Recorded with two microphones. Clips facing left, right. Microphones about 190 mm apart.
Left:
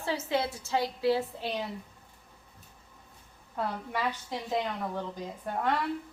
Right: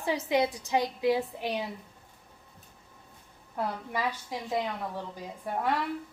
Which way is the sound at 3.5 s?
10° right (ahead or behind).